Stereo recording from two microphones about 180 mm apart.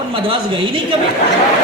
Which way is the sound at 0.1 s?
30° right (ahead or behind).